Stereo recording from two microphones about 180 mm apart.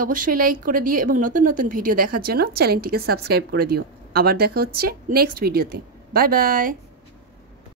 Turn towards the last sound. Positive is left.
turn(degrees=-50)  # may be behind; listen again after turning